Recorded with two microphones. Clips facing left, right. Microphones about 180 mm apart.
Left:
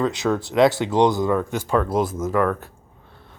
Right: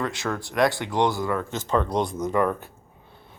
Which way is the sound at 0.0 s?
20° left (ahead or behind).